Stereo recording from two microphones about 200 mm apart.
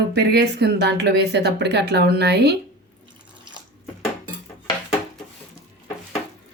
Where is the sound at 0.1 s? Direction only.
55° right (ahead or behind).